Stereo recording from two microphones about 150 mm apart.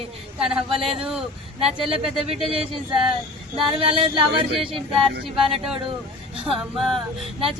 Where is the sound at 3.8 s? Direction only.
35° right (ahead or behind).